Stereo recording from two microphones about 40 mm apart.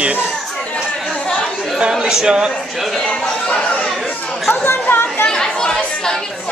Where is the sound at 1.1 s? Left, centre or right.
Left.